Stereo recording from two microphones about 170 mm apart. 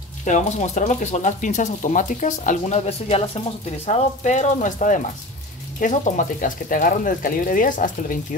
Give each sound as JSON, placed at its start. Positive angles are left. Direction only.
{"t": 0.2, "sound": "speech", "side_deg": 45}